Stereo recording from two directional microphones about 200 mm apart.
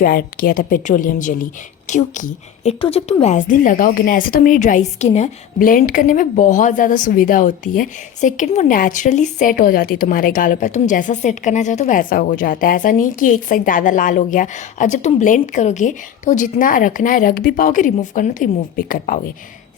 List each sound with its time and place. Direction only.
0.0 s a woman's voice: 45° left (ahead or behind)